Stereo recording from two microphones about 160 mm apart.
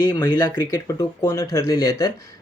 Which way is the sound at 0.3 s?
25° left (ahead or behind).